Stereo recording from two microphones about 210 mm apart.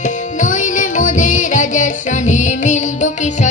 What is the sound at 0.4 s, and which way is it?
Music, 35° left (ahead or behind).